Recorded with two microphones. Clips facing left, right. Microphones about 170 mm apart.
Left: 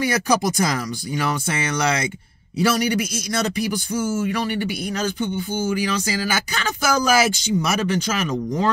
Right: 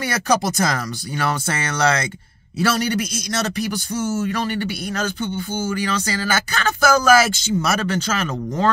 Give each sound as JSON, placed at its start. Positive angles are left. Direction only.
{"t": 0.0, "sound": "speech", "side_deg": 10}